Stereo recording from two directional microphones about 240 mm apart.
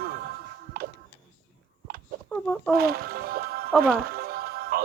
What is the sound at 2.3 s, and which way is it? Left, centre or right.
Speech, centre.